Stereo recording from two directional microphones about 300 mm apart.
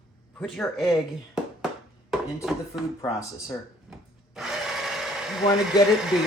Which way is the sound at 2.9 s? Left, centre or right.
Centre.